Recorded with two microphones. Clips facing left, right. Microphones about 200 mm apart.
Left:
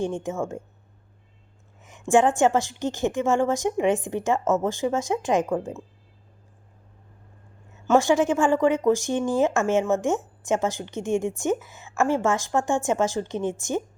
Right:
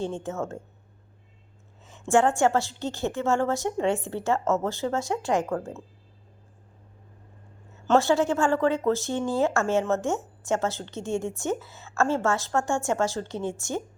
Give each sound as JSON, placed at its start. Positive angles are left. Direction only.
{"t": 0.0, "sound": "speech", "side_deg": 15}
{"t": 1.8, "sound": "speech", "side_deg": 15}
{"t": 7.9, "sound": "speech", "side_deg": 15}